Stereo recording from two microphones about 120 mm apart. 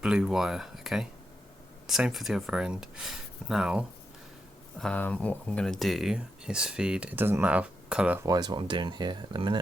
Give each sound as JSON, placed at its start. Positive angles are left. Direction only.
{"t": 0.0, "sound": "speech", "side_deg": -5}
{"t": 4.8, "sound": "speech", "side_deg": 10}
{"t": 8.2, "sound": "speech", "side_deg": -35}